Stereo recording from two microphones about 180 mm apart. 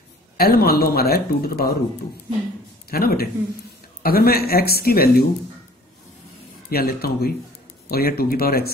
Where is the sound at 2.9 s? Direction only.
60° left (ahead or behind).